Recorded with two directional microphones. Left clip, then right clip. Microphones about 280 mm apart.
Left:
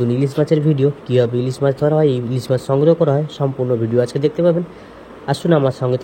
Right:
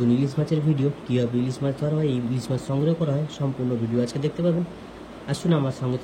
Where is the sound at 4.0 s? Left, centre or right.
Centre.